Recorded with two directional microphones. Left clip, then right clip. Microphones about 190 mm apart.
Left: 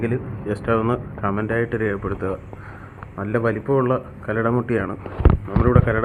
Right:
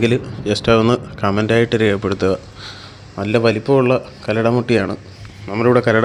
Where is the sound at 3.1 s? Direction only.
45° right (ahead or behind).